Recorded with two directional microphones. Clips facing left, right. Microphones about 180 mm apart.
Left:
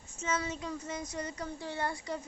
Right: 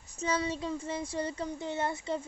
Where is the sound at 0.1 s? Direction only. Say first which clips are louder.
Right 3 dB; 35° right (ahead or behind).